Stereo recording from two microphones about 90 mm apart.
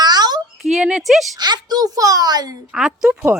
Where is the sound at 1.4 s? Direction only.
50° right (ahead or behind).